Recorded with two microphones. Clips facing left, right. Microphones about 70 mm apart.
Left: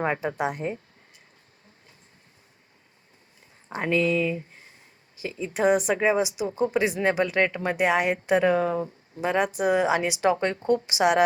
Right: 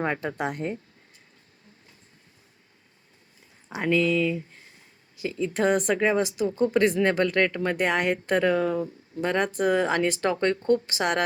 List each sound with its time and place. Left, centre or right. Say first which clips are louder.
0.0 s speech: left 2 dB; centre
3.8 s speech: right 1 dB; centre
4.1 s speech: right 1 dB; left
5.5 s speech: left 2 dB; centre
8.5 s speech: even; left
9.2 s speech: left 1 dB; centre